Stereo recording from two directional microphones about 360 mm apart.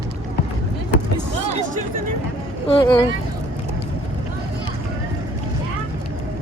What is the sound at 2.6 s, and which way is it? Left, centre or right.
Speech, centre.